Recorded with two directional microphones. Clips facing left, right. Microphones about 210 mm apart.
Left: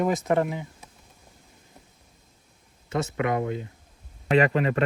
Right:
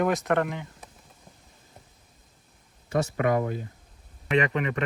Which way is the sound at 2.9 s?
25° left (ahead or behind).